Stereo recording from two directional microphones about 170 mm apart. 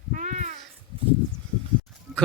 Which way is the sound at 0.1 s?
50° right (ahead or behind).